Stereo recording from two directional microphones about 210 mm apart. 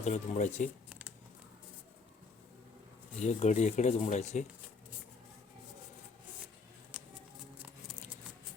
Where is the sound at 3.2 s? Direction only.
35° left (ahead or behind).